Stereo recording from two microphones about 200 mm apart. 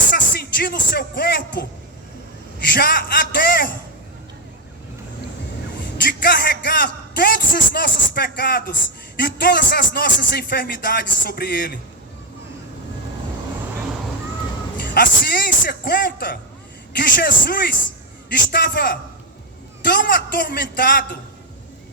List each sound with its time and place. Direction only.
0.1 s speech: 50° left (ahead or behind)
2.7 s speech: 50° left (ahead or behind)
6.1 s speech: 45° left (ahead or behind)
14.8 s speech: 50° left (ahead or behind)